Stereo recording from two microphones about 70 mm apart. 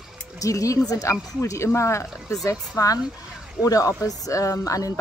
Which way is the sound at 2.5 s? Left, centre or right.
Left.